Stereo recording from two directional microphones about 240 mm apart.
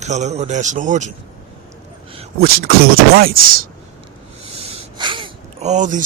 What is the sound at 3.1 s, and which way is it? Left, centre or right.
Speech, right.